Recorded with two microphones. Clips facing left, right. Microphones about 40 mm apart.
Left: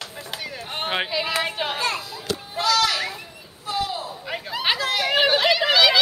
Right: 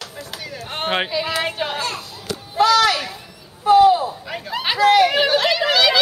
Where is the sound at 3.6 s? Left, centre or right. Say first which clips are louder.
Right 15 dB; right.